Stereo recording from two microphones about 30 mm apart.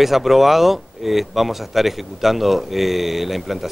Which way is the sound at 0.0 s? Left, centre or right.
Centre.